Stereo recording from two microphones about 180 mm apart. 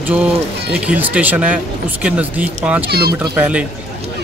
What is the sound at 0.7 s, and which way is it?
Speech, 5° right (ahead or behind).